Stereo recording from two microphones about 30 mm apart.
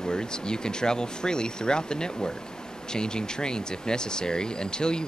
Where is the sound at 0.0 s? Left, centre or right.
Left.